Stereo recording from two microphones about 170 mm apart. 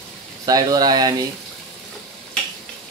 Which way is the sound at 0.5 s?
20° right (ahead or behind).